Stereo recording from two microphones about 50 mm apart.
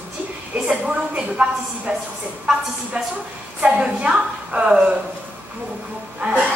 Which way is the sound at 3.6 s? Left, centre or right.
Right.